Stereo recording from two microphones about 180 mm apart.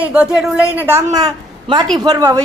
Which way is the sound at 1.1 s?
25° right (ahead or behind).